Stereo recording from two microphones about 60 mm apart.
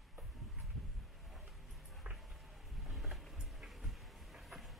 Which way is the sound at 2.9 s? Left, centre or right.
Centre.